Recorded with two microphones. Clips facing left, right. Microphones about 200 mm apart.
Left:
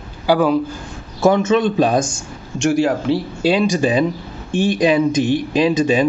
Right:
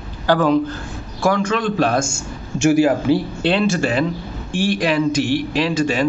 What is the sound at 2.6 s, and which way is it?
Speech, 5° right (ahead or behind).